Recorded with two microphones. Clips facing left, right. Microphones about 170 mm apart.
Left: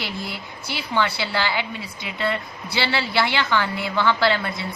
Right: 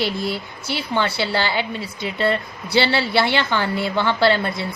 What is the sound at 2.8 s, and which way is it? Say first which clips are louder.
A woman's voice: right 3 dB; 30° right (ahead or behind).